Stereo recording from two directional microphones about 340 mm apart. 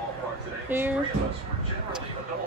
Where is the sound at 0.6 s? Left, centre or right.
Centre.